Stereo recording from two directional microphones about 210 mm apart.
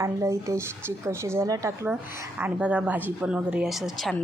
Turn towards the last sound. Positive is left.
turn(degrees=0)  # may be behind; listen again after turning